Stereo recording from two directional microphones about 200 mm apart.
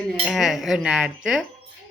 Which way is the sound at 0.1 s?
Centre (ahead or behind).